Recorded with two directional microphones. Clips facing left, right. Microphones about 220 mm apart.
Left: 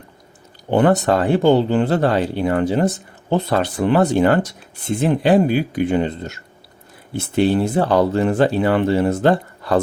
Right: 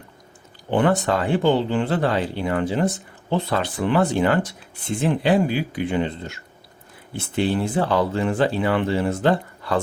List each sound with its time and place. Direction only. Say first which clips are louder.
0.7 s speech: left 4 dB; 40° left (ahead or behind)